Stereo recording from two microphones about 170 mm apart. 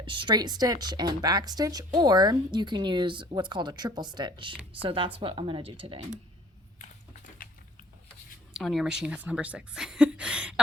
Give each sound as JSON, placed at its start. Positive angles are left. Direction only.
{"t": 0.0, "sound": "speech", "side_deg": -30}
{"t": 6.7, "sound": "a sound", "side_deg": 45}
{"t": 8.5, "sound": "a woman's voice", "side_deg": 0}